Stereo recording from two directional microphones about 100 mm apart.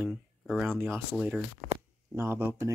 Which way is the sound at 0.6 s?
25° right (ahead or behind).